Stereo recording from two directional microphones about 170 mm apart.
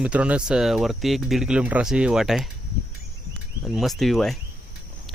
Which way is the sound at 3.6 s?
Centre (ahead or behind).